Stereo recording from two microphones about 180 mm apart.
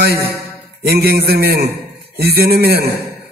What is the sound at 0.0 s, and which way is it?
Mantra, 60° right (ahead or behind).